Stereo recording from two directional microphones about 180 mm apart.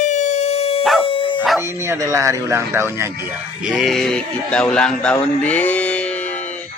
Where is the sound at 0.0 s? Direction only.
40° left (ahead or behind).